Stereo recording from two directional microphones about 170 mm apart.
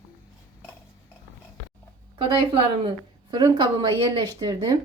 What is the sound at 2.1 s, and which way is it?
A woman's voice, 30° right (ahead or behind).